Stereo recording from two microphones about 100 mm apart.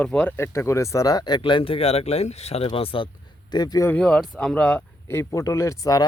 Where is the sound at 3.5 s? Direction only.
45° left (ahead or behind).